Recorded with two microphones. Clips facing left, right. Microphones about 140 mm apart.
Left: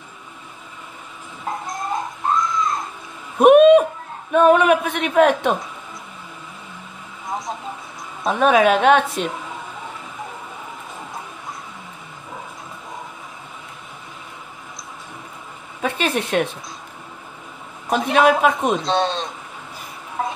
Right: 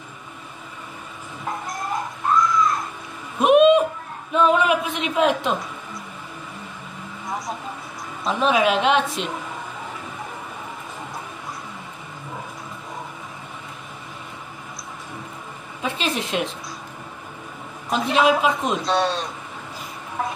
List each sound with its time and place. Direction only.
1.7 s a sound: 25° left (ahead or behind)
3.3 s a sound: 50° left (ahead or behind)
4.3 s speech: 55° left (ahead or behind)
7.2 s vehicle: 20° left (ahead or behind)
8.2 s a woman's voice: 50° left (ahead or behind)
15.8 s speech: 55° left (ahead or behind)
17.9 s a woman's voice: 50° left (ahead or behind)
18.9 s speech: 25° left (ahead or behind)